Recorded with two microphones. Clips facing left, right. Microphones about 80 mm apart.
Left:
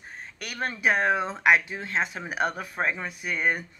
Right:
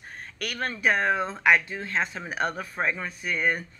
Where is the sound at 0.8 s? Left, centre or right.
Centre.